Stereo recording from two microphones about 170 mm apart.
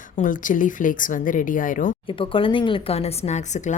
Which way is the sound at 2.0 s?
30° left (ahead or behind).